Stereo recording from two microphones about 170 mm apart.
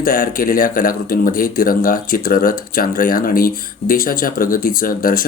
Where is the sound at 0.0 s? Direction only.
55° left (ahead or behind).